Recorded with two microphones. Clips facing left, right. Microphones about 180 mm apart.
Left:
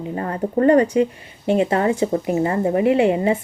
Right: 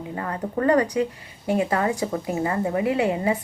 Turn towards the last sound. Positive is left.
turn(degrees=25)  # may be behind; listen again after turning